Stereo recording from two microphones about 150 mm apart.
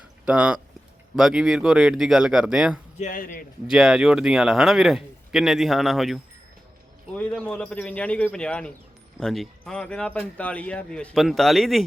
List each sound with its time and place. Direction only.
0.3 s speech: 10° right (ahead or behind)
3.0 s speech: 65° left (ahead or behind)
3.7 s speech: 5° right (ahead or behind)
7.2 s speech: 10° left (ahead or behind)